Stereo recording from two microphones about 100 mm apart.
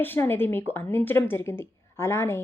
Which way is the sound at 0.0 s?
20° left (ahead or behind).